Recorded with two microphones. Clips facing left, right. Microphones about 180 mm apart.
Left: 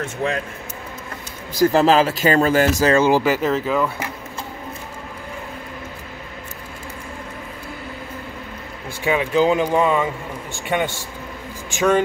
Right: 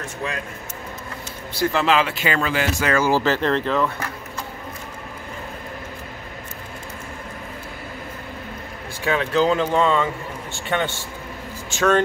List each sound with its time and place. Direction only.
1.6 s speech: 40° left (ahead or behind)
2.9 s speech: 20° left (ahead or behind)
9.0 s speech: 15° left (ahead or behind)